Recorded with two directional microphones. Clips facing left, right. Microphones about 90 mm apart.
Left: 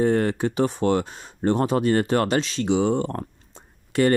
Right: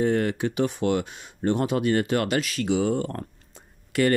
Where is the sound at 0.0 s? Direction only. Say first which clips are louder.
Left 2 dB; 35° left (ahead or behind).